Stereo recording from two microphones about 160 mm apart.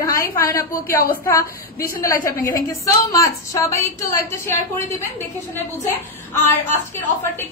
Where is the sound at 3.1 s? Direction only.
20° left (ahead or behind).